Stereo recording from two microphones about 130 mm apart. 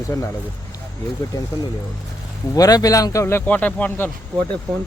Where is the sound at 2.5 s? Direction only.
30° left (ahead or behind); by 4.1 s 10° left (ahead or behind).